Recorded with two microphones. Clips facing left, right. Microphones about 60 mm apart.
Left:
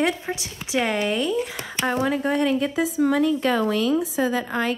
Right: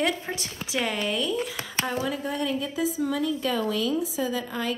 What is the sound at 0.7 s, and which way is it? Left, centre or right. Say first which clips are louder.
A woman's voice: left 5 dB; left.